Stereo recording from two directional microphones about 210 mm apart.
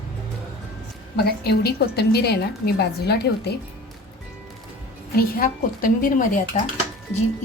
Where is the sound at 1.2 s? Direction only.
50° left (ahead or behind).